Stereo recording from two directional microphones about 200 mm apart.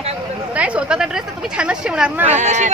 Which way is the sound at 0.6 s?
5° right (ahead or behind).